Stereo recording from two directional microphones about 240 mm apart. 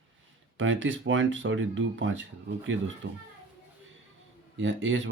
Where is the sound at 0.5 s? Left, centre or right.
Right.